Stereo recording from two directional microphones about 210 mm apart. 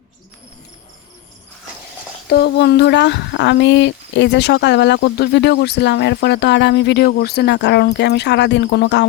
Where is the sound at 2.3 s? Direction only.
50° left (ahead or behind).